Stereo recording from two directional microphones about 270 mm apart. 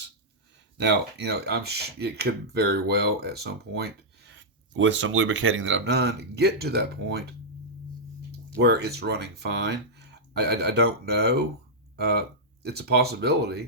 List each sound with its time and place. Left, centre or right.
0.8 s speech: right
8.3 s speech: right